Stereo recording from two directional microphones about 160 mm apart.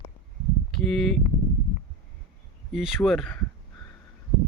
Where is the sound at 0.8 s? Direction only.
5° left (ahead or behind).